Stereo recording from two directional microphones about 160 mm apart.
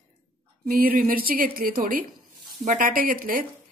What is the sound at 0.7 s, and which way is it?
Speech, 65° right (ahead or behind).